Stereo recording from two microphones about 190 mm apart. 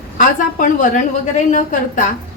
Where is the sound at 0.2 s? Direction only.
45° left (ahead or behind).